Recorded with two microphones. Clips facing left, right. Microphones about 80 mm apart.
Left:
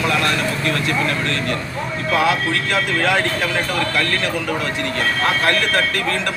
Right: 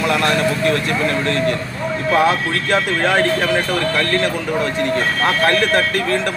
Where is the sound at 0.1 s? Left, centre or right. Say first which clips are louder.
Right 3 dB; right.